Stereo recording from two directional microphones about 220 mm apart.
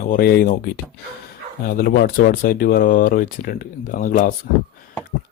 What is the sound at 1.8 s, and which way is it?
Speech, 40° left (ahead or behind).